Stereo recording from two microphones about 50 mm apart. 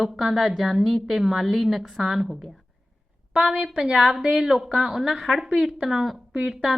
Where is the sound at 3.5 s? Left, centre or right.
Centre.